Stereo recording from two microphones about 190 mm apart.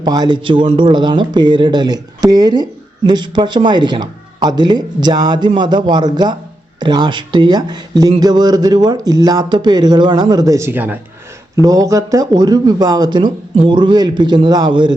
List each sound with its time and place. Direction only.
0.0 s speech: 20° right (ahead or behind)